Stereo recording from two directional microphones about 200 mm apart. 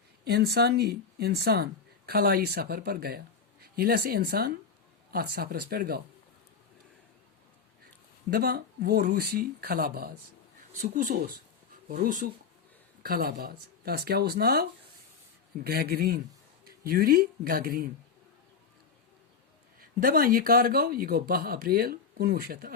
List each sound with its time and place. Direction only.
0.3 s speech: 55° right (ahead or behind)
8.3 s speech: 50° right (ahead or behind)
19.8 s speech: 45° right (ahead or behind)